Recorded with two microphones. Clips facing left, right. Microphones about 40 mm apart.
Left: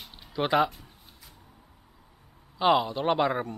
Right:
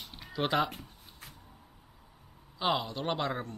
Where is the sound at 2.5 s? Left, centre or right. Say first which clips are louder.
Left 8 dB; centre.